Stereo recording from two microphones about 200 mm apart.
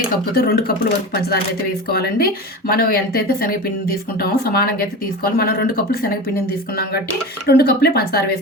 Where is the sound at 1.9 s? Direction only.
50° left (ahead or behind).